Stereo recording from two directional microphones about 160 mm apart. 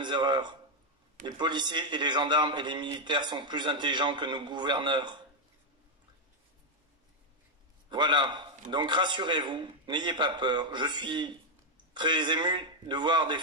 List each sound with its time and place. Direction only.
0.0 s a man's voice: 30° right (ahead or behind)
7.9 s a man's voice: 30° right (ahead or behind)